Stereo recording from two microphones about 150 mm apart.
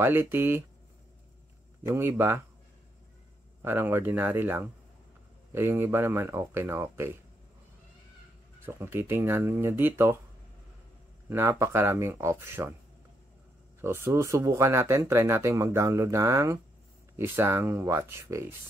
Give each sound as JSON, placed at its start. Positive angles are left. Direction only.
{"t": 0.0, "sound": "speech", "side_deg": -15}
{"t": 1.8, "sound": "speech", "side_deg": -15}
{"t": 3.6, "sound": "speech", "side_deg": -15}
{"t": 8.6, "sound": "speech", "side_deg": -15}
{"t": 11.2, "sound": "speech", "side_deg": -15}
{"t": 13.7, "sound": "speech", "side_deg": -15}